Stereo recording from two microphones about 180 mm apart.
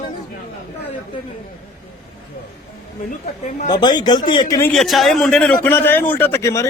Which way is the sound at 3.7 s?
25° left (ahead or behind).